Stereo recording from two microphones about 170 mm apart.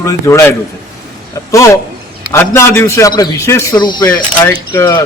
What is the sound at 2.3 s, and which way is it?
A man's voice, 15° left (ahead or behind).